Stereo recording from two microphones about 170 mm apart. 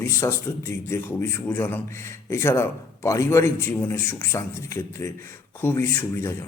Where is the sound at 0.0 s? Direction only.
15° left (ahead or behind).